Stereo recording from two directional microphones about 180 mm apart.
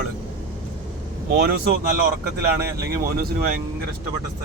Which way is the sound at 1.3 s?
60° right (ahead or behind).